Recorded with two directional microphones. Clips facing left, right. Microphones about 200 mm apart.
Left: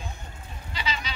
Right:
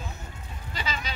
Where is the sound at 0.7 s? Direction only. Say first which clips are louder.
Left 1 dB; 45° right (ahead or behind).